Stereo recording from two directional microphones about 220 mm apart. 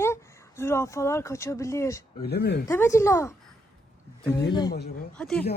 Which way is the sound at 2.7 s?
10° left (ahead or behind).